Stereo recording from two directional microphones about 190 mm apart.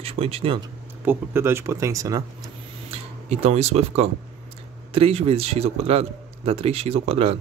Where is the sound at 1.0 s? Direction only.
10° right (ahead or behind).